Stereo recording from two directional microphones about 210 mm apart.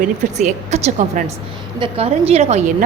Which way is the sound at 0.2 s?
35° right (ahead or behind).